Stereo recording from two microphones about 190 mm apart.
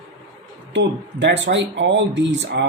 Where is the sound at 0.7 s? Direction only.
70° right (ahead or behind).